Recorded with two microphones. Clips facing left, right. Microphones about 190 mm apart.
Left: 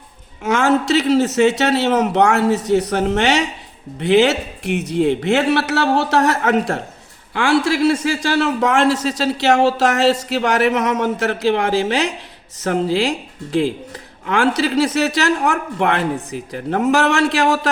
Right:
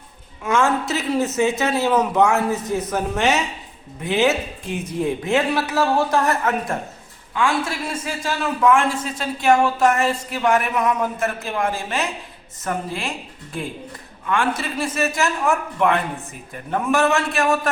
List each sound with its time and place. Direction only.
0.4 s a man's voice: 75° left (ahead or behind)